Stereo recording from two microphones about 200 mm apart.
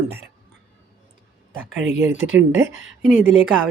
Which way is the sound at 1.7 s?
65° right (ahead or behind).